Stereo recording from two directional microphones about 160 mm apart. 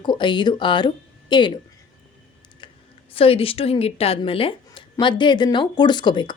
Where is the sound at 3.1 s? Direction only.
35° left (ahead or behind).